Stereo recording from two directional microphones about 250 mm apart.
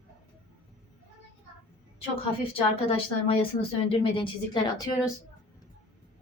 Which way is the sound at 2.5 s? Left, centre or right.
Left.